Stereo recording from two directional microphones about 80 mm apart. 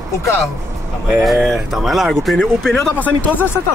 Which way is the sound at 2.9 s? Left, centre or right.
Left.